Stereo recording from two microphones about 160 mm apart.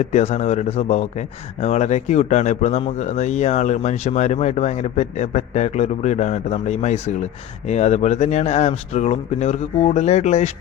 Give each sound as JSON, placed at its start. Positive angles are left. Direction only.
{"t": 0.0, "sound": "speech", "side_deg": 45}